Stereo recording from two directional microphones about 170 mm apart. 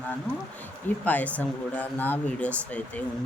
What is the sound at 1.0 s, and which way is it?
Speech, 10° left (ahead or behind).